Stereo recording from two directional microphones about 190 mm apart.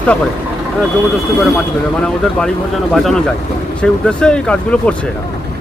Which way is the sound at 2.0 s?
5° left (ahead or behind).